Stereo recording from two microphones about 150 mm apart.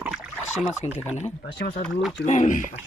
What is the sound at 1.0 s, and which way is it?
Speech, 50° left (ahead or behind).